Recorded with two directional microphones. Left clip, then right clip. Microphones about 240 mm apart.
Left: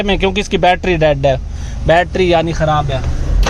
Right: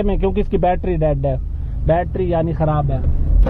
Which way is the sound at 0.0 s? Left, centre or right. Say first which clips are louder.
Left 5 dB; centre.